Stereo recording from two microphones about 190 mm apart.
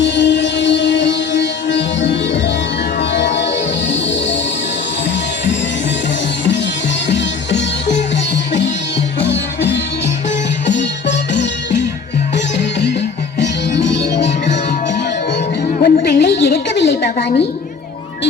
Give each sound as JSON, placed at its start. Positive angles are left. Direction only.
{"t": 0.0, "sound": "music", "side_deg": 70}
{"t": 7.1, "sound": "music", "side_deg": 70}
{"t": 10.7, "sound": "music", "side_deg": 65}
{"t": 13.4, "sound": "music", "side_deg": 70}
{"t": 15.8, "sound": "a sound", "side_deg": 60}